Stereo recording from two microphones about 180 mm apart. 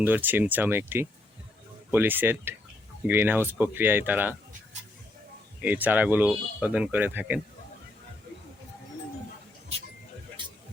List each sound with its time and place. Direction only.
0.0 s speech: 10° right (ahead or behind)
5.6 s speech: 10° right (ahead or behind)
10.4 s a sound: 25° right (ahead or behind)